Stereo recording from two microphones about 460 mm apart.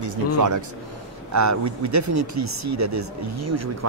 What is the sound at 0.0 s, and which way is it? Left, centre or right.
Speech, right.